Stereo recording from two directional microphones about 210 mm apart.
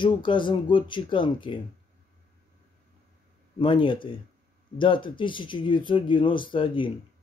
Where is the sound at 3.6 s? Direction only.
25° left (ahead or behind).